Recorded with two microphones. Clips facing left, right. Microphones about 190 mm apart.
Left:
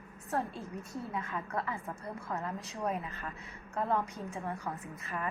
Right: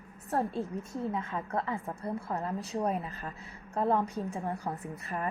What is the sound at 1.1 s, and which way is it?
Speech, 30° right (ahead or behind).